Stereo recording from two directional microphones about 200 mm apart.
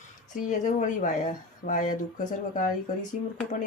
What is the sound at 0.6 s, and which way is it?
Speech, 40° left (ahead or behind).